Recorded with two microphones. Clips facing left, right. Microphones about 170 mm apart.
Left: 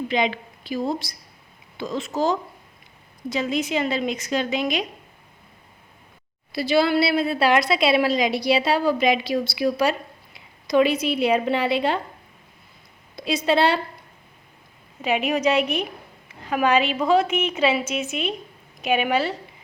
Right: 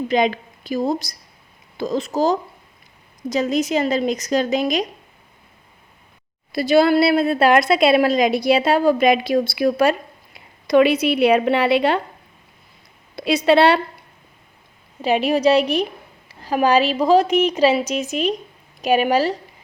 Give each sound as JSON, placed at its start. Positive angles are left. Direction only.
{"t": 0.1, "sound": "a woman's voice", "side_deg": -45}
{"t": 6.5, "sound": "a woman's voice", "side_deg": -50}
{"t": 10.7, "sound": "a woman's voice", "side_deg": -65}
{"t": 13.1, "sound": "a woman's voice", "side_deg": -70}
{"t": 15.0, "sound": "a woman's voice", "side_deg": -35}